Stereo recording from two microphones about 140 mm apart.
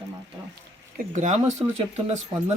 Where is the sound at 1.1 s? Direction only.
60° right (ahead or behind).